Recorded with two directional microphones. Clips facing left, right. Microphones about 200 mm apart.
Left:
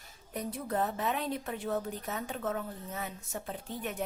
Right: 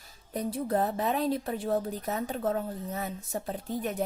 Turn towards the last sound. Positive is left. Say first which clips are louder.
# right 6 dB
turn(degrees=-40)  # may be behind; listen again after turning